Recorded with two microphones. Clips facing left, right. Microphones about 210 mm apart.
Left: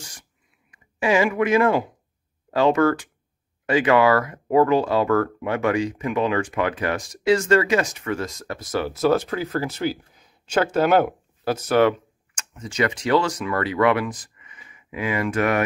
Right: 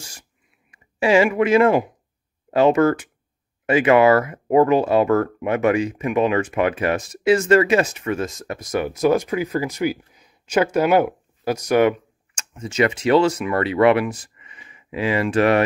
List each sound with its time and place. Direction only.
0.7 s speech: 25° right (ahead or behind)
12.4 s speech: 25° right (ahead or behind)
14.2 s a sound: 25° right (ahead or behind)